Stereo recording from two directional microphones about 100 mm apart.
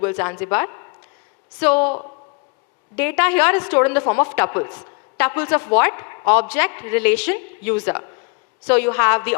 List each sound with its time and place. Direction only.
0.0 s a woman's voice: 25° left (ahead or behind)